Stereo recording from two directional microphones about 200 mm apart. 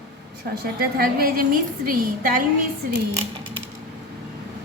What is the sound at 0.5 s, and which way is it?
A woman's voice, 45° right (ahead or behind).